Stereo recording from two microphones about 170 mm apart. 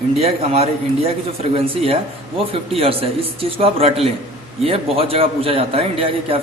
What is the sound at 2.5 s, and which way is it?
A man's voice, 35° right (ahead or behind).